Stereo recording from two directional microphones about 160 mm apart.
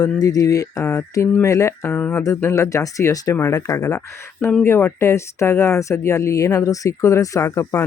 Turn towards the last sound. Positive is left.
turn(degrees=20)  # may be behind; listen again after turning